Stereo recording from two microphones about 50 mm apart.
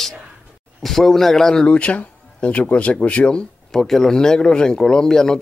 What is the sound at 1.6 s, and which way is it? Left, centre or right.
Speech, left.